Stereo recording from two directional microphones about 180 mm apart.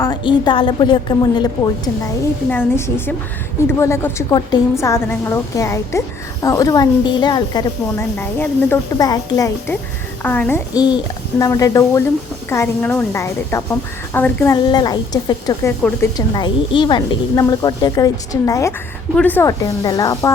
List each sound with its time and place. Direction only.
0.0 s a woman's voice: 25° left (ahead or behind)
2.5 s a woman's voice: 10° left (ahead or behind)
10.8 s a woman's voice: 25° left (ahead or behind)
14.5 s a woman's voice: 25° left (ahead or behind)